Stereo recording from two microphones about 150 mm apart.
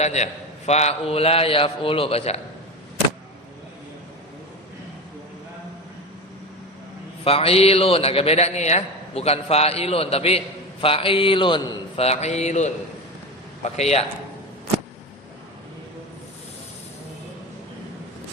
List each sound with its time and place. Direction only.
0.0 s a man's voice: 50° left (ahead or behind)
7.3 s a man's voice: 40° left (ahead or behind)
13.7 s a man's voice: 45° left (ahead or behind)